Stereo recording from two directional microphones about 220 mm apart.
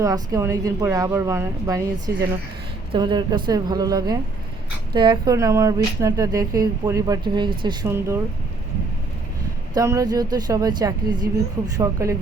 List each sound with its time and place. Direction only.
0.0 s a woman's voice: 15° right (ahead or behind)
9.7 s speech: 15° right (ahead or behind)